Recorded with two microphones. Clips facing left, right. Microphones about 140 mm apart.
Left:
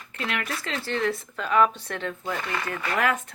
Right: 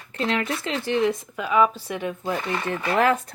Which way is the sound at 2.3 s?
25° right (ahead or behind).